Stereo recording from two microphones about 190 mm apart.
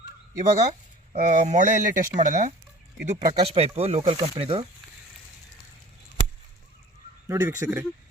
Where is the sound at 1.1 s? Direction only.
40° right (ahead or behind).